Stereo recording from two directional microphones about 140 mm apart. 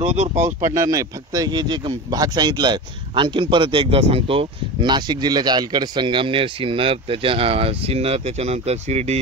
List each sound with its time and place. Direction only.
0.0 s speech: 55° right (ahead or behind)
0.7 s speech: 25° right (ahead or behind); by 9.2 s 50° right (ahead or behind)